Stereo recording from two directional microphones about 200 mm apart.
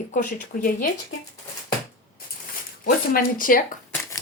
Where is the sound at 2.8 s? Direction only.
45° left (ahead or behind).